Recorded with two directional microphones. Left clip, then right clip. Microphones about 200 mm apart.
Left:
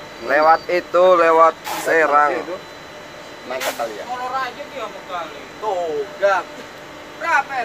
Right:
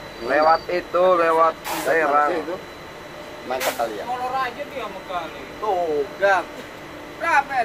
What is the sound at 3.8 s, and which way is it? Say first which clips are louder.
Speech: even; 15° right (ahead or behind).